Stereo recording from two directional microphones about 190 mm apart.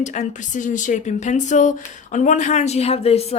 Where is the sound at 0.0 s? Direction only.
40° left (ahead or behind).